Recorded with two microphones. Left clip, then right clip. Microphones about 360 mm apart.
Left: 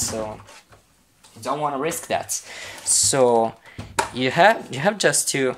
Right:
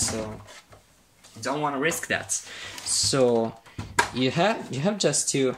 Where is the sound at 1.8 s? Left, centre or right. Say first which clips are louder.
Left 2 dB; centre.